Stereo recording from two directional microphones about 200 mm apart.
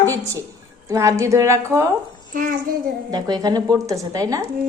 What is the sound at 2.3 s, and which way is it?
Speech, 45° right (ahead or behind).